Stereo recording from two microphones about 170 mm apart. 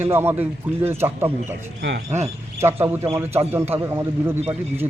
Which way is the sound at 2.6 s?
15° right (ahead or behind).